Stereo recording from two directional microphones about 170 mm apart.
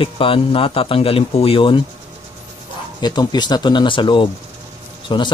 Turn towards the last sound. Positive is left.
turn(degrees=30)  # may be behind; listen again after turning